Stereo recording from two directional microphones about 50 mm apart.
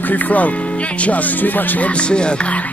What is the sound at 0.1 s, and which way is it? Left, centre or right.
Speech, left.